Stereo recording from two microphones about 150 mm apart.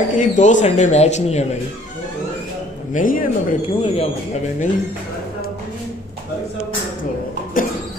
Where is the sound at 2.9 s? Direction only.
65° left (ahead or behind).